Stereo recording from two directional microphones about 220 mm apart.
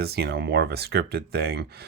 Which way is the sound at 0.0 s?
45° right (ahead or behind).